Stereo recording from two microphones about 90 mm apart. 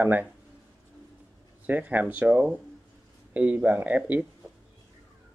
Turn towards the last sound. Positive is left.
turn(degrees=-15)  # may be behind; listen again after turning